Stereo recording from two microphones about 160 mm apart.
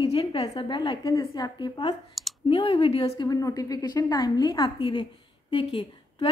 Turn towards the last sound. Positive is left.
turn(degrees=30)  # may be behind; listen again after turning